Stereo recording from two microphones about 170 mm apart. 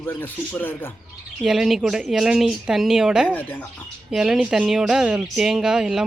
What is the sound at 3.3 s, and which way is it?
Speech, 10° left (ahead or behind).